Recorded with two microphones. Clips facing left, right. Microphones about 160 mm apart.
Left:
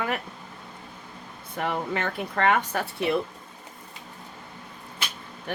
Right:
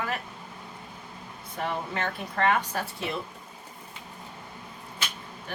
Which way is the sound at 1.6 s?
60° left (ahead or behind).